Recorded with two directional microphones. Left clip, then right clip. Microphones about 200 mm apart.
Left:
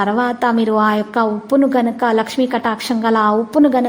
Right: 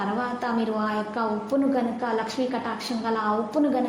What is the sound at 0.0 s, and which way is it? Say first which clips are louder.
A woman's voice: left 11 dB; 45° left (ahead or behind).